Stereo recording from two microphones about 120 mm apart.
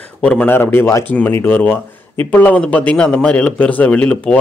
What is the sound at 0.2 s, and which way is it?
A man's voice, 10° left (ahead or behind).